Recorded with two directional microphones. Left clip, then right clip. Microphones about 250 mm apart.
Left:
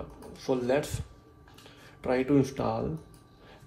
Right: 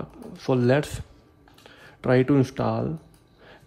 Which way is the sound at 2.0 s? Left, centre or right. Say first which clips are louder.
Right 5 dB; right.